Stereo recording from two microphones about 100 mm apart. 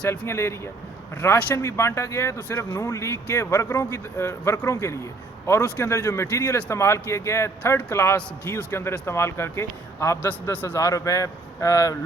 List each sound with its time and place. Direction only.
0.1 s a man's voice: 25° left (ahead or behind)
10.8 s a man's voice: 35° left (ahead or behind)